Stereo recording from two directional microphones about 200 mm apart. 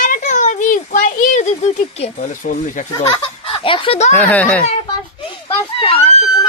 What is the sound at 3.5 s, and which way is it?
Speech, 25° left (ahead or behind).